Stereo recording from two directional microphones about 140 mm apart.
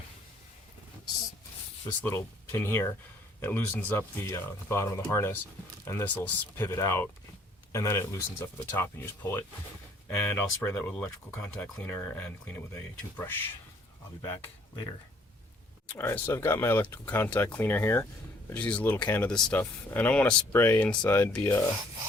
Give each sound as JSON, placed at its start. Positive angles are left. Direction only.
{"t": 2.0, "sound": "speech", "side_deg": 15}
{"t": 15.9, "sound": "speech", "side_deg": 15}